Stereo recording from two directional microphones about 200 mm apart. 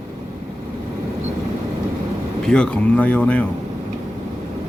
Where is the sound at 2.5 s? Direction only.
5° left (ahead or behind).